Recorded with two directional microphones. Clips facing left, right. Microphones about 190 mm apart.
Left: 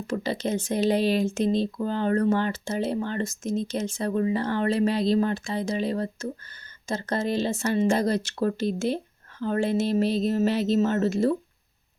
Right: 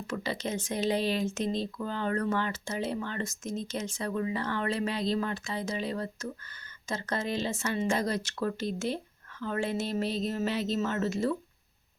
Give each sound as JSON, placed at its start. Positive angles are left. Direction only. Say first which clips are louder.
{"t": 0.1, "sound": "speech", "louder": "left 6 dB", "side_deg": 30}